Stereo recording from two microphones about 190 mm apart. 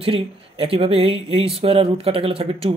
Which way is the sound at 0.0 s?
30° right (ahead or behind).